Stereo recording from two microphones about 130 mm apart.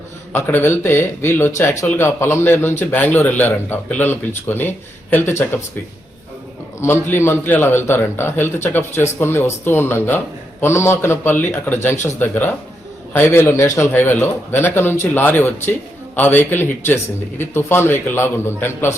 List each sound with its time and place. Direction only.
0.3 s a man's voice: 15° left (ahead or behind)
6.7 s a man's voice: 20° left (ahead or behind)